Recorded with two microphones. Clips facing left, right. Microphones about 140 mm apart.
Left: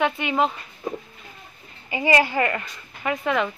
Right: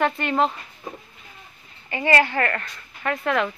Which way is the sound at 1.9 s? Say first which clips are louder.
Even; 15° left (ahead or behind).